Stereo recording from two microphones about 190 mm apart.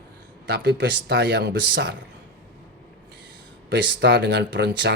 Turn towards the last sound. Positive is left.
turn(degrees=-65)  # may be behind; listen again after turning